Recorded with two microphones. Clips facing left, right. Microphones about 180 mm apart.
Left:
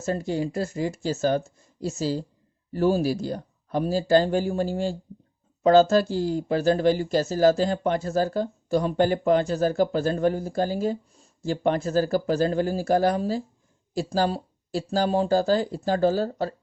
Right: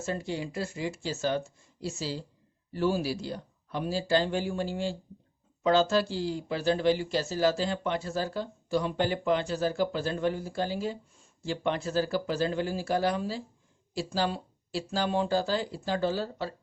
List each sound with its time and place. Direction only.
0.0 s speech: 40° left (ahead or behind)